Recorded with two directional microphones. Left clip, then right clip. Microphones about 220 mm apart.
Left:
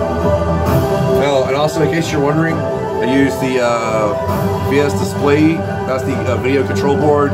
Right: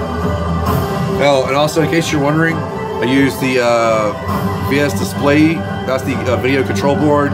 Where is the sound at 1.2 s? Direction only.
50° right (ahead or behind).